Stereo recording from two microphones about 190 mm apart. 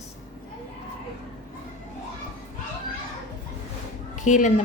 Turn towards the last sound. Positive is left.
turn(degrees=40)  # may be behind; listen again after turning